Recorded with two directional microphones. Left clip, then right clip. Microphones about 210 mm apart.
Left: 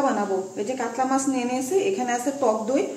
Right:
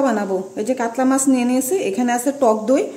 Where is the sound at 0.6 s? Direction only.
55° right (ahead or behind).